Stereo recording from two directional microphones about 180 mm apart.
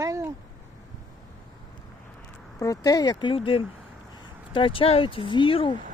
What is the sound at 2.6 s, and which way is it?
Speech, 20° left (ahead or behind).